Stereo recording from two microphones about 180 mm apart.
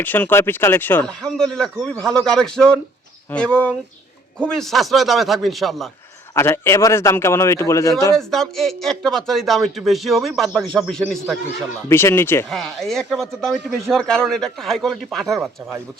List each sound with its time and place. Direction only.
0.0 s a man's voice: 10° left (ahead or behind)
6.3 s a man's voice: 15° left (ahead or behind)
8.1 s speech: centre (ahead or behind)
11.9 s a man's voice: 15° left (ahead or behind)
12.5 s speech: centre (ahead or behind)